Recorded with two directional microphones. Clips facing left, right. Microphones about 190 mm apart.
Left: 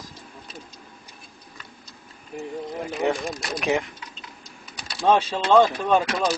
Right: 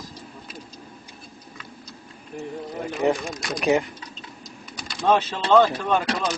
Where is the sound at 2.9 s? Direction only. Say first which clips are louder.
Right 2 dB; centre (ahead or behind).